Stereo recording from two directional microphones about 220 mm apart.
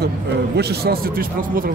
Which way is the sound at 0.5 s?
45° right (ahead or behind).